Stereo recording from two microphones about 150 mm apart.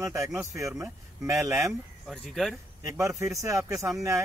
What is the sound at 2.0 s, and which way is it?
Speech, centre (ahead or behind).